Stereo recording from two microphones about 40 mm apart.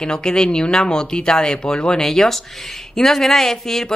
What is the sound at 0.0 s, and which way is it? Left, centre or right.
Speech, centre.